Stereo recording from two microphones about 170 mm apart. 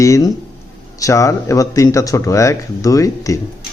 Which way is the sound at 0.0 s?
20° left (ahead or behind).